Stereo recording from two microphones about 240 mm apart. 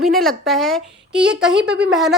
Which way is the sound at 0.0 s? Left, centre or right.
Centre.